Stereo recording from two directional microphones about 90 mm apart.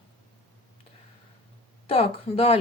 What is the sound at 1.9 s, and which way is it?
Speech, 90° left.